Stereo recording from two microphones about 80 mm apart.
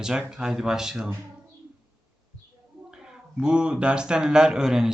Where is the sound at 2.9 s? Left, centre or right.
Centre.